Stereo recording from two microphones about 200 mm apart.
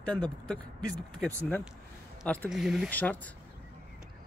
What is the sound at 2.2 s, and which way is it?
Speech, 5° left (ahead or behind).